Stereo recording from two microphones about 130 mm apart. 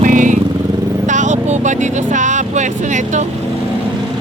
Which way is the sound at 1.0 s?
70° right (ahead or behind).